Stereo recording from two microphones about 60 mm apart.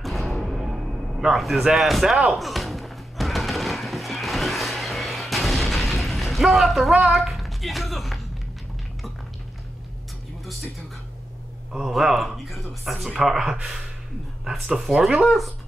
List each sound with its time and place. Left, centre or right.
0.0 s music: centre
11.7 s speech: centre